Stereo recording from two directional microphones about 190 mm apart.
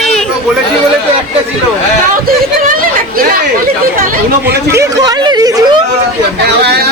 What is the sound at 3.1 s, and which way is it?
Chatter, 50° right (ahead or behind).